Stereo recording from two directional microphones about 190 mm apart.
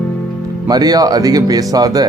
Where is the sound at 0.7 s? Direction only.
20° right (ahead or behind).